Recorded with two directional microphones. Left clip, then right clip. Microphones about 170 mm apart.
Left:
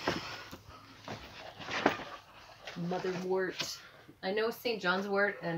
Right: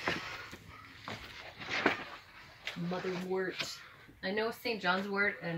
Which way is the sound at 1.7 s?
40° left (ahead or behind).